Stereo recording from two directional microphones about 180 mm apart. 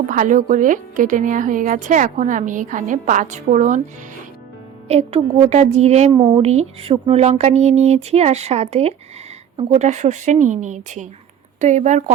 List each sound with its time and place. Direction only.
0.1 s speech: 45° right (ahead or behind)
4.9 s speech: 35° right (ahead or behind)